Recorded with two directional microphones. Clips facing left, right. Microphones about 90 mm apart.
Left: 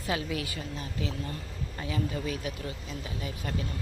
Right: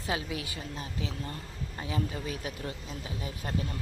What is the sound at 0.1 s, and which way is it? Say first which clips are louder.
A woman's voice: left 2 dB; 20° right (ahead or behind).